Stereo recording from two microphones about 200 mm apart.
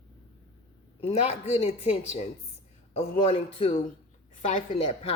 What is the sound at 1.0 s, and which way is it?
Speech, 35° left (ahead or behind).